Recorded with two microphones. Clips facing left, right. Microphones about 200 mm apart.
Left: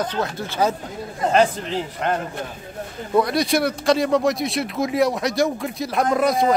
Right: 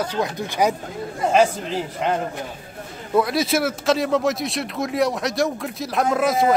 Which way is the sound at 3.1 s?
Centre (ahead or behind).